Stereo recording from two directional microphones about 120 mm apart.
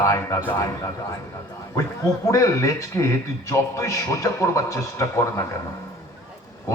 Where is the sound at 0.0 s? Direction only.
30° left (ahead or behind).